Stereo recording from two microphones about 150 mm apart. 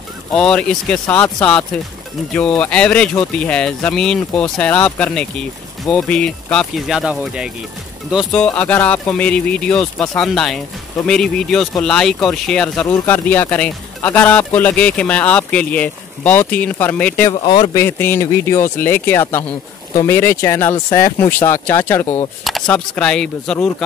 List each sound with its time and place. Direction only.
0.3 s speech: 5° left (ahead or behind)
17.3 s speech: 30° left (ahead or behind)
17.8 s speech: 15° left (ahead or behind)
22.4 s speech: 5° left (ahead or behind)